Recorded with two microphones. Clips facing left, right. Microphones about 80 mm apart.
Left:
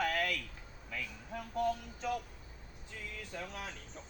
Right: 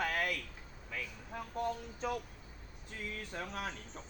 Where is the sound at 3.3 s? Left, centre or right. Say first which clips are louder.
Right 2 dB; right.